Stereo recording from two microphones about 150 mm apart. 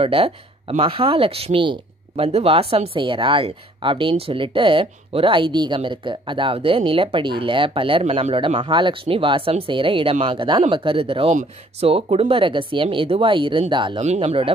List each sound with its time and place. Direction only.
0.0 s speech: 40° right (ahead or behind)
14.0 s speech: 45° right (ahead or behind)